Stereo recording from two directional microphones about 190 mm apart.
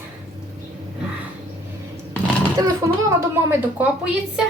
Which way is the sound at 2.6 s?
20° right (ahead or behind).